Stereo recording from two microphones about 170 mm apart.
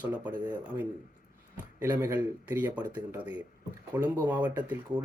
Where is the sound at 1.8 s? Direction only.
15° right (ahead or behind).